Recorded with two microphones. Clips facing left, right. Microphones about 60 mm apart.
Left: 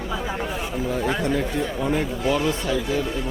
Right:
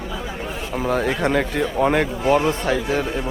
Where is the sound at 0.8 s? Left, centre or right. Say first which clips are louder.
Right 4 dB; right.